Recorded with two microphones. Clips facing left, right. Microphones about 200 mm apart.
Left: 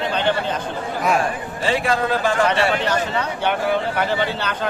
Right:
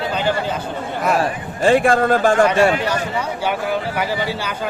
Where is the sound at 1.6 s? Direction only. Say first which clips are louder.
Right 6 dB; 50° right (ahead or behind).